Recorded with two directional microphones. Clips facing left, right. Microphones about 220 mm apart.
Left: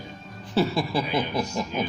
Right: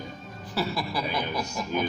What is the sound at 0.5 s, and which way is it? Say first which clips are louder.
Speech: left 6 dB; 25° left (ahead or behind).